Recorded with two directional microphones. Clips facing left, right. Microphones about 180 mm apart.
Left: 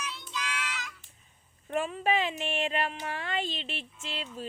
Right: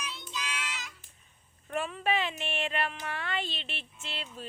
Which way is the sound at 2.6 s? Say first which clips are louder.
Left 2 dB; 30° left (ahead or behind).